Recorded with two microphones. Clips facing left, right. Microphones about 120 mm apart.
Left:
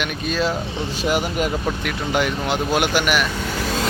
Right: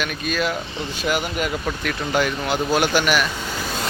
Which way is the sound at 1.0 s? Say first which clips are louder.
Left 2 dB; 35° left (ahead or behind).